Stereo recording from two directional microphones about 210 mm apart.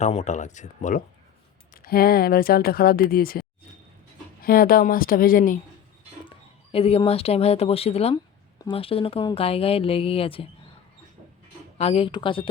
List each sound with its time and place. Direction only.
0.0 s speech: 30° left (ahead or behind)
6.2 s speech: 25° left (ahead or behind)
11.8 s speech: 30° left (ahead or behind)